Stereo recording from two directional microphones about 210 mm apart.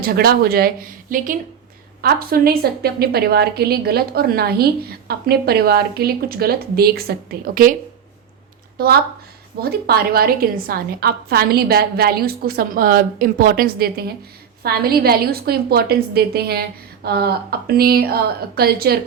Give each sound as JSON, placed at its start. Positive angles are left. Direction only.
{"t": 0.0, "sound": "a woman's voice", "side_deg": -45}
{"t": 9.6, "sound": "a woman's voice", "side_deg": -50}